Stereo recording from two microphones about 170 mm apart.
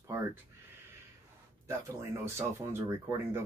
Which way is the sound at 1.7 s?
15° right (ahead or behind).